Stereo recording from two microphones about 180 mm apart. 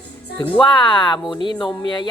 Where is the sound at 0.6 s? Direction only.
25° left (ahead or behind).